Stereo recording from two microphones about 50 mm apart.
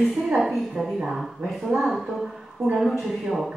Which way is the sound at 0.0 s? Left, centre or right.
Centre.